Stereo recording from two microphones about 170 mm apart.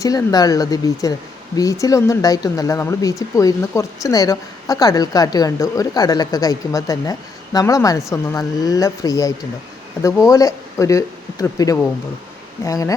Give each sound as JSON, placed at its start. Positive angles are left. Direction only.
{"t": 0.0, "sound": "speech", "side_deg": 20}